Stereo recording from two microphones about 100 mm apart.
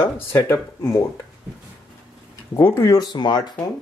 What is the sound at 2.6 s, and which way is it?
Speech, 35° left (ahead or behind).